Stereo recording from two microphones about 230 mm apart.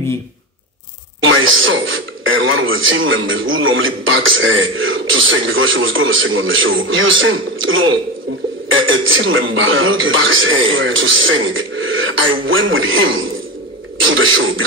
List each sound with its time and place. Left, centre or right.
1.2 s speech: right